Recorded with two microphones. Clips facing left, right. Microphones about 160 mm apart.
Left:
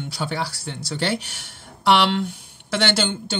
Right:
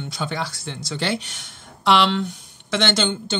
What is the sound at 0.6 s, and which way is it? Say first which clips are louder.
Speech: even; 30° left (ahead or behind).